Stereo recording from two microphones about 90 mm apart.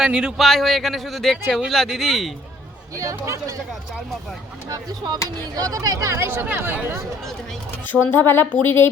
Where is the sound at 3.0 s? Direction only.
40° right (ahead or behind).